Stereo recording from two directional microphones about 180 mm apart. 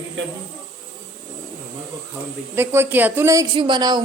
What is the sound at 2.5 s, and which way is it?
Speech, 15° right (ahead or behind).